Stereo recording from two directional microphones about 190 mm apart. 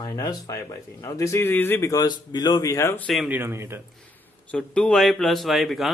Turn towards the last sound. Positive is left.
turn(degrees=0)  # may be behind; listen again after turning